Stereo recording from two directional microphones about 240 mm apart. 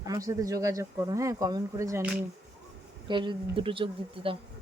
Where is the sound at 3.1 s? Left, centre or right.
Centre.